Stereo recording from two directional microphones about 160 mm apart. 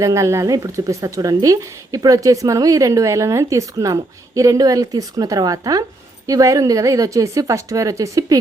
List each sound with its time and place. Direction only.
0.0 s speech: 20° right (ahead or behind)